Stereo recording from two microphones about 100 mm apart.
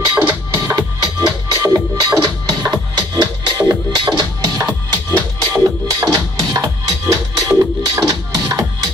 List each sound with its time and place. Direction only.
0.1 s music: 15° right (ahead or behind)
1.5 s music: 40° right (ahead or behind)